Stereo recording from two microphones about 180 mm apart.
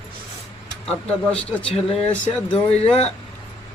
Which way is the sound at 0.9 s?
5° left (ahead or behind).